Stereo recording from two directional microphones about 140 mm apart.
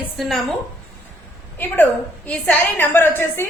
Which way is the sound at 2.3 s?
10° left (ahead or behind).